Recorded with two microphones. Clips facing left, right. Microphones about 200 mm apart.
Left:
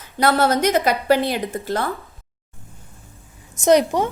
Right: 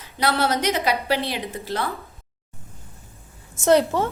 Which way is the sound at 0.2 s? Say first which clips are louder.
Left 5 dB; 45° left (ahead or behind).